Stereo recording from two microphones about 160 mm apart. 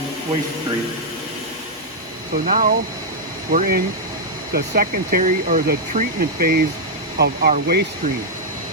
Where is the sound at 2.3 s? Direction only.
60° right (ahead or behind).